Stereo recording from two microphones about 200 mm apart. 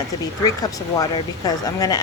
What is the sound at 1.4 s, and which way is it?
Speech, 20° left (ahead or behind).